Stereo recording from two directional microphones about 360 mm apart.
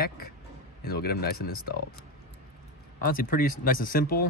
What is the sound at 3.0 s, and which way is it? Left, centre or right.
Speech, left.